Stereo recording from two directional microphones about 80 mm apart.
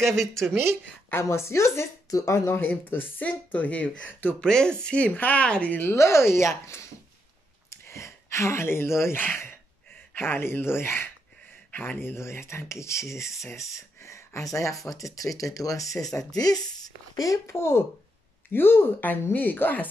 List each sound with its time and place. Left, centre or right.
0.0 s speech: centre
0.4 s speech: right
1.1 s speech: left
4.4 s speech: centre
5.9 s speech: left